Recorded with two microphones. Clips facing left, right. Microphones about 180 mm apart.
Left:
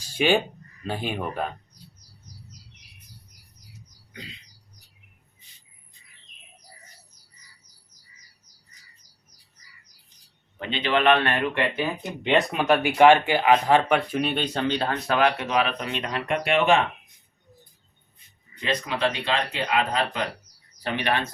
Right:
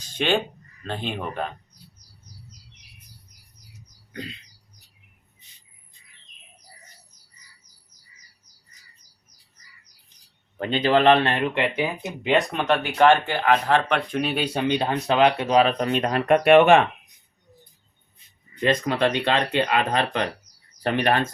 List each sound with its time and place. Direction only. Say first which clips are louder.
0.0 s speech: left 2 dB; 10° left (ahead or behind)
10.6 s speech: right 4 dB; 45° right (ahead or behind); by 11.9 s 15° right (ahead or behind)
12.2 s speech: even; centre (ahead or behind); by 16.8 s 60° right (ahead or behind)
18.6 s speech: right 5 dB; 55° right (ahead or behind)
20.8 s speech: right 5 dB; 50° right (ahead or behind)